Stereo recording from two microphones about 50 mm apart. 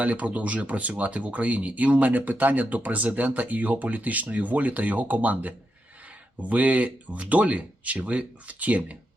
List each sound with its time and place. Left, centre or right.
0.0 s speech: right